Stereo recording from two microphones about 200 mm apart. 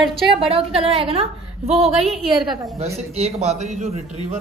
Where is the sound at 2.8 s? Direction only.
30° right (ahead or behind).